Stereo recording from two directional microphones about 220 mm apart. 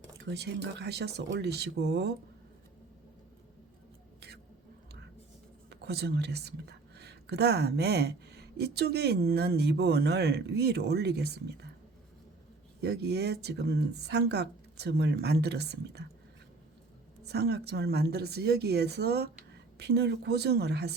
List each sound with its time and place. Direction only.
0.3 s speech: 50° right (ahead or behind)
5.7 s speech: 50° right (ahead or behind)
12.8 s speech: 50° right (ahead or behind)
17.2 s speech: 50° right (ahead or behind)